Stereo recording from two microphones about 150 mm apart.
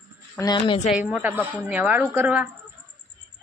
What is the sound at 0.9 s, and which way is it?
Speech, 10° right (ahead or behind).